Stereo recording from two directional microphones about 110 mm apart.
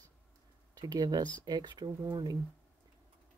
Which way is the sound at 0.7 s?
35° right (ahead or behind).